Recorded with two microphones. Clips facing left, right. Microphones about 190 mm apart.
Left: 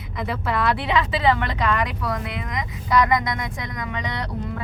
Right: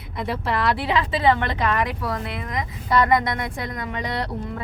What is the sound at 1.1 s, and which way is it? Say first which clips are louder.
Speech: right 1 dB; 25° right (ahead or behind).